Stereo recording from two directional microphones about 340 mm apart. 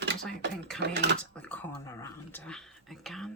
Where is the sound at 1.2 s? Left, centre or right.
Centre.